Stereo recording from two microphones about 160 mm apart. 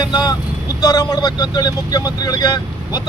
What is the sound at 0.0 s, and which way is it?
Speech, 25° left (ahead or behind).